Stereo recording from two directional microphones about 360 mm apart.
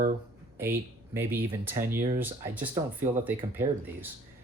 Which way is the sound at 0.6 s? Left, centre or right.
Centre.